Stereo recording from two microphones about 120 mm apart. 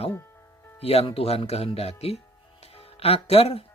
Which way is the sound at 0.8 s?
55° left (ahead or behind).